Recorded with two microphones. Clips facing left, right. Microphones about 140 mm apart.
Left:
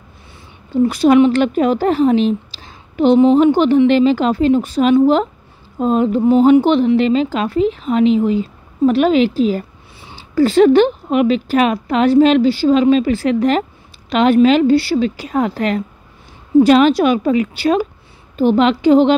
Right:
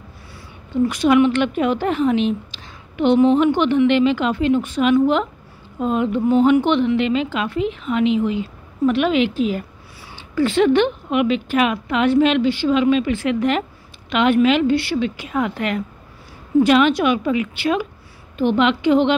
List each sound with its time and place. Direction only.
0.8 s a woman's voice: 35° left (ahead or behind)